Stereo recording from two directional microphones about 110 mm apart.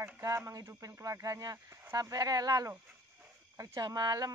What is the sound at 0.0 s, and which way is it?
A man's voice, 25° right (ahead or behind).